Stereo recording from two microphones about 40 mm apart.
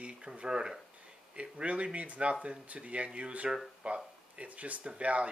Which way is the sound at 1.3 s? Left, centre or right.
Right.